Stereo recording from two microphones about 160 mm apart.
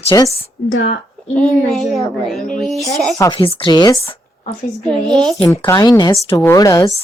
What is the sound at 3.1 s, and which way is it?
Speech, 20° left (ahead or behind).